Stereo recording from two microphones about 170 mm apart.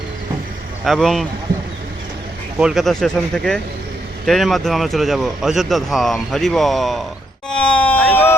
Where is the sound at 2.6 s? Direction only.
5° right (ahead or behind).